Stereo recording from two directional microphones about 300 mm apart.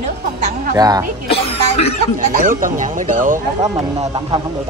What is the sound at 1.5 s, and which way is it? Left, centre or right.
Cough, left.